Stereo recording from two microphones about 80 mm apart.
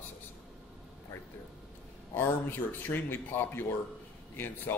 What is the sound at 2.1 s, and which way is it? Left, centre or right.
A man's voice, left.